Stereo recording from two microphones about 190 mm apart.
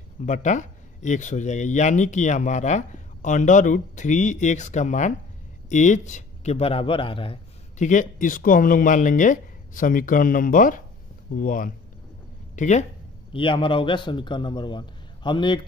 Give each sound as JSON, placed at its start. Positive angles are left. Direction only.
{"t": 0.2, "sound": "a man's voice", "side_deg": 40}
{"t": 7.8, "sound": "speech", "side_deg": 40}
{"t": 13.3, "sound": "a man's voice", "side_deg": 25}